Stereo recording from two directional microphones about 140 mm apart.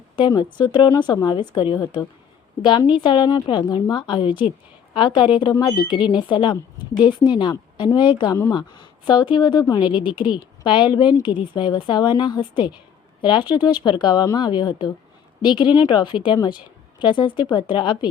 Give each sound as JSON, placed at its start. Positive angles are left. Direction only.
{"t": 0.2, "sound": "a woman's voice", "side_deg": 35}